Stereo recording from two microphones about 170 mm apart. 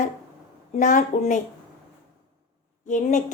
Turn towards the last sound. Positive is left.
turn(degrees=45)  # may be behind; listen again after turning